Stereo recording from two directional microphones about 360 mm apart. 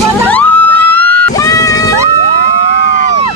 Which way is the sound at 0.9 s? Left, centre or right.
Left.